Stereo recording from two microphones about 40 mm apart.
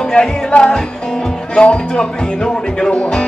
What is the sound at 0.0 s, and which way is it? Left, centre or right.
Speech, centre.